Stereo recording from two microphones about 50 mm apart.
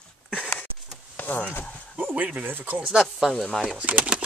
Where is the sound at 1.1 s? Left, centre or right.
Left.